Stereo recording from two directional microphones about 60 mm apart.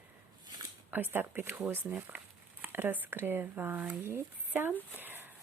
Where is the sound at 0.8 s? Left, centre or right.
Right.